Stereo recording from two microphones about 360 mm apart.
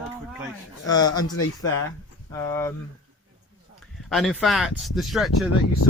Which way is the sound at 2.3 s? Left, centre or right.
Centre.